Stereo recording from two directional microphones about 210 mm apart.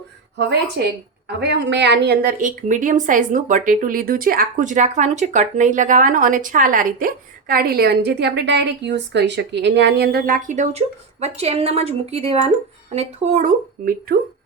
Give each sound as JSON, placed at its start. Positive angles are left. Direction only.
{"t": 0.3, "sound": "a woman's voice", "side_deg": -55}